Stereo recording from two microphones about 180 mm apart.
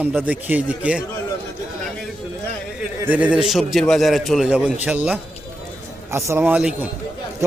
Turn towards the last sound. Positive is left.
turn(degrees=-5)  # may be behind; listen again after turning